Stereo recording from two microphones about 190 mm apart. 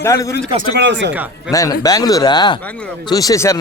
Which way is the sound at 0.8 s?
70° right (ahead or behind).